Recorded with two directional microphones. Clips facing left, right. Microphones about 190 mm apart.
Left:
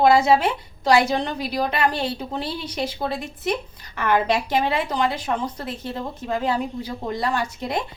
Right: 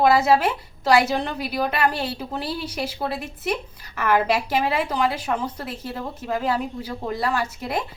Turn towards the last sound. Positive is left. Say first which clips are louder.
# left 1 dB
turn(degrees=-5)  # may be behind; listen again after turning